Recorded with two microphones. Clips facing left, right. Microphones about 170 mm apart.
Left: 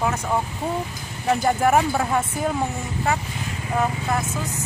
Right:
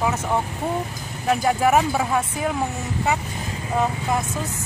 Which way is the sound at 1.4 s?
5° right (ahead or behind).